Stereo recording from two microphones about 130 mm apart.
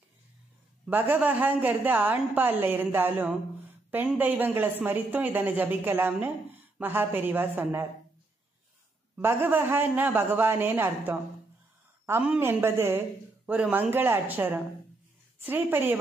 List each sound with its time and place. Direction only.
0.8 s a woman's voice: 15° right (ahead or behind)
9.1 s a woman's voice: 15° right (ahead or behind)